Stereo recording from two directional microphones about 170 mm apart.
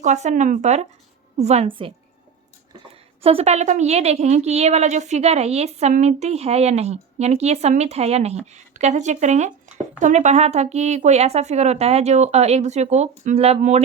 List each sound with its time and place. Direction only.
0.0 s a woman's voice: 45° right (ahead or behind)
2.9 s a woman's voice: 35° right (ahead or behind)